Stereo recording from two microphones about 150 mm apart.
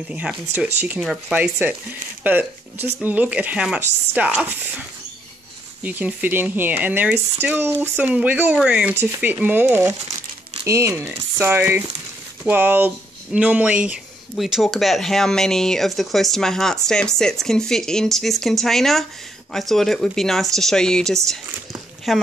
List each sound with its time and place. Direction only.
0.1 s speech: 5° right (ahead or behind)